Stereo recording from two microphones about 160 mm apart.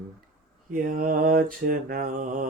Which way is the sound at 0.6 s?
60° right (ahead or behind).